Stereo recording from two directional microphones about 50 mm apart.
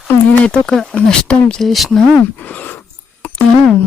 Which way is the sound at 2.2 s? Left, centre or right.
Left.